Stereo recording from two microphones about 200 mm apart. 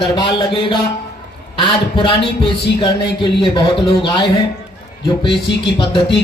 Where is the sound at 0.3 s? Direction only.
25° left (ahead or behind).